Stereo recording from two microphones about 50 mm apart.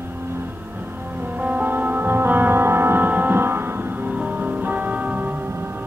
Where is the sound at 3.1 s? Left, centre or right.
Right.